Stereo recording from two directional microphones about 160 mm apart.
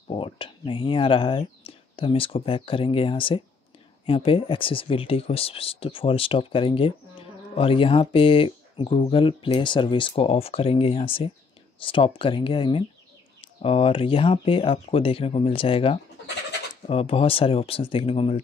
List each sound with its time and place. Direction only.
0.1 s speech: 30° left (ahead or behind)